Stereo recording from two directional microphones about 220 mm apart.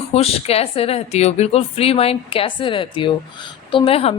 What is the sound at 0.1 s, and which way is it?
Speech, 25° left (ahead or behind).